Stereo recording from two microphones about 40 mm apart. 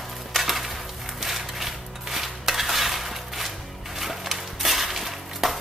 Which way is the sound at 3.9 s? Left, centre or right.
Centre.